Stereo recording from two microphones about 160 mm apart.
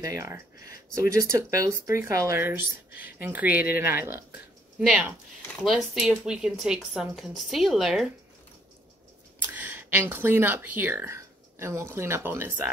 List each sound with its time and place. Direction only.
0.0 s speech: 20° right (ahead or behind); by 8.1 s centre (ahead or behind)
9.5 s speech: 10° right (ahead or behind)